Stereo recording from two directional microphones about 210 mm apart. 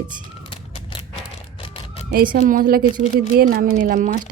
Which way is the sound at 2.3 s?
40° right (ahead or behind).